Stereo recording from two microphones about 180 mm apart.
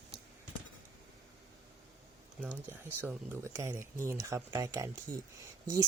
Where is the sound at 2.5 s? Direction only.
10° right (ahead or behind).